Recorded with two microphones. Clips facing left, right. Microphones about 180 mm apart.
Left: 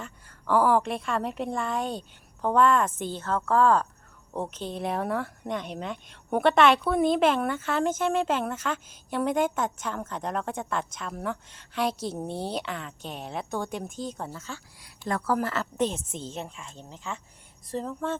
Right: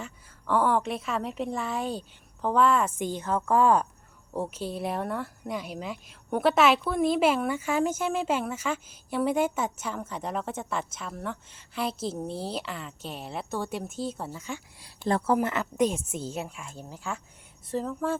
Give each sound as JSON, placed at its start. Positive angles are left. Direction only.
{"t": 0.0, "sound": "speech", "side_deg": 0}
{"t": 14.8, "sound": "a woman's voice", "side_deg": -30}
{"t": 15.4, "sound": "a woman's voice", "side_deg": -15}